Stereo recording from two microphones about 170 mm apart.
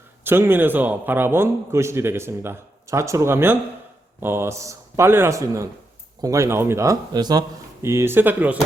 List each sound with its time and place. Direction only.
0.3 s a man's voice: 15° right (ahead or behind)